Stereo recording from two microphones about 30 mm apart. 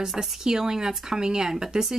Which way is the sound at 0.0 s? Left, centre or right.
Centre.